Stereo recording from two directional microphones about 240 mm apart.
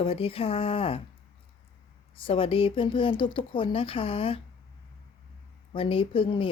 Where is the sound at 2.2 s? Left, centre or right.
Left.